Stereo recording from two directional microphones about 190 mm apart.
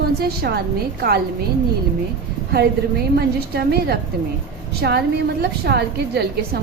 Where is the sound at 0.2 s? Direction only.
55° right (ahead or behind).